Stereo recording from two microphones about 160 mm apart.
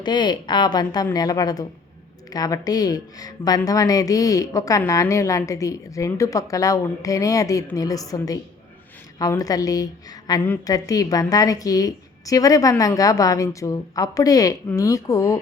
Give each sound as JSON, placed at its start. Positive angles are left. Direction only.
{"t": 0.0, "sound": "speech", "side_deg": 25}